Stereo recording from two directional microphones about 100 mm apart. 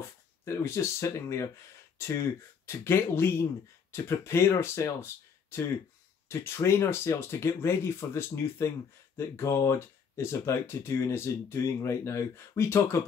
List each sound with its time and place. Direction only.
0.5 s speech: 30° left (ahead or behind)